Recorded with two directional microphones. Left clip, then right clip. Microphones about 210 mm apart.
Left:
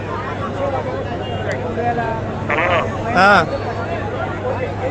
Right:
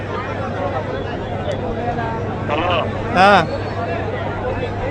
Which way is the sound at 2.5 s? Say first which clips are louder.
Left 2 dB; 15° right (ahead or behind).